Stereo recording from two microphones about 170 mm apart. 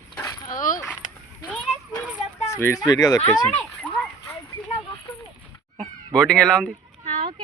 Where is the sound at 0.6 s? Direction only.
50° left (ahead or behind).